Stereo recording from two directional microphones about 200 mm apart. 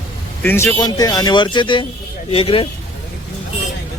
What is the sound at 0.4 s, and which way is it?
Speech, 10° left (ahead or behind).